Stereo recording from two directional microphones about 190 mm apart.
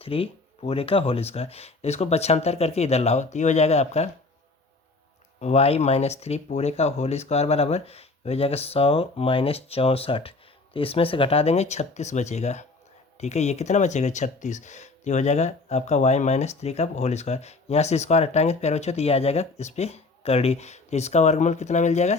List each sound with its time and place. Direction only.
0.0 s speech: 30° left (ahead or behind)
5.4 s speech: 35° left (ahead or behind)